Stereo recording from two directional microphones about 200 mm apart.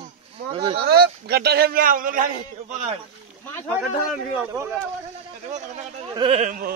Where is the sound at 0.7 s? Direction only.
55° right (ahead or behind).